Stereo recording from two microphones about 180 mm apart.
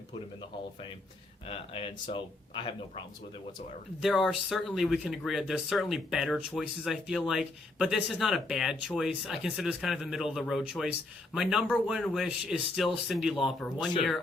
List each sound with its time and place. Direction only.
1.5 s speech: 30° left (ahead or behind)
4.0 s speech: centre (ahead or behind)